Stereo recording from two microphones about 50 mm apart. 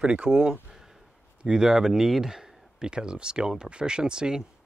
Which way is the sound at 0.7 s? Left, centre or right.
Centre.